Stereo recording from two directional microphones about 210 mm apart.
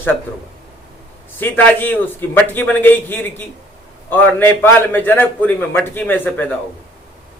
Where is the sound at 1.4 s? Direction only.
10° left (ahead or behind).